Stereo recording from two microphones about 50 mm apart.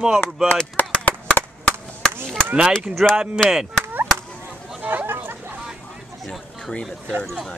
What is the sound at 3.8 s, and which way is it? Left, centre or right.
Chop, right.